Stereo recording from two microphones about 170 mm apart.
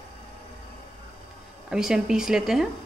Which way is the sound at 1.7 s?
5° right (ahead or behind).